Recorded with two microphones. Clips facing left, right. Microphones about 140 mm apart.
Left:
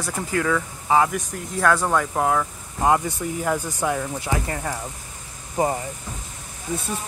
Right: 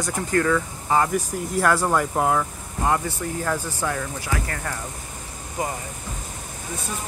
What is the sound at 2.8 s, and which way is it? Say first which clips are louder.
Speech: left 3 dB; 15° left (ahead or behind).